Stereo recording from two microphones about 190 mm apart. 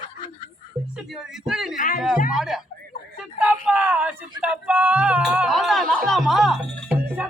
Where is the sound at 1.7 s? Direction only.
45° left (ahead or behind).